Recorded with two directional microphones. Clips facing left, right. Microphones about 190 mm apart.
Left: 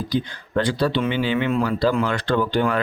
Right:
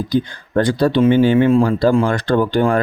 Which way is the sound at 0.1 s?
45° right (ahead or behind).